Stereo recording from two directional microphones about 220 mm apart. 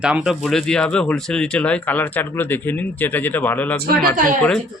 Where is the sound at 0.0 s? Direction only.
5° right (ahead or behind).